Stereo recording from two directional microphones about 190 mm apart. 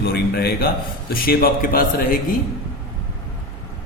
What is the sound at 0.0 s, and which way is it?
A man's voice, 55° left (ahead or behind).